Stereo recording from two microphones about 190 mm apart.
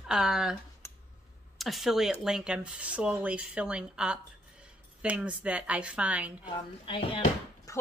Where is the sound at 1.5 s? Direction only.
Centre (ahead or behind).